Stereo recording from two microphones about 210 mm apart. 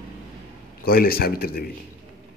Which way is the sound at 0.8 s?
45° left (ahead or behind).